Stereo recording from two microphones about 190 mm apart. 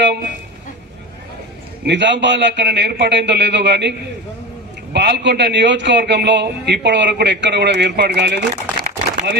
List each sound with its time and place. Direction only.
1.8 s a man's voice: 65° right (ahead or behind)
4.9 s a man's voice: 65° right (ahead or behind)
8.8 s a sound: 55° right (ahead or behind)